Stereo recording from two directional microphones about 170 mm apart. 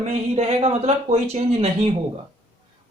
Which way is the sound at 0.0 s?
40° right (ahead or behind).